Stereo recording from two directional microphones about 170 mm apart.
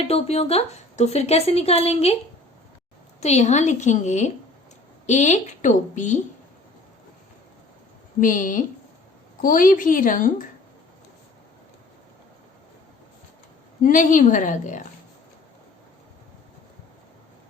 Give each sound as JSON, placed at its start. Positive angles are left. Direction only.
{"t": 0.1, "sound": "a woman's voice", "side_deg": 35}
{"t": 3.2, "sound": "a woman's voice", "side_deg": 40}
{"t": 8.2, "sound": "a woman's voice", "side_deg": 50}
{"t": 13.8, "sound": "a woman's voice", "side_deg": 50}